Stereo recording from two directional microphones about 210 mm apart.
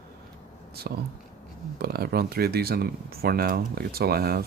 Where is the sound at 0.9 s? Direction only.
45° right (ahead or behind).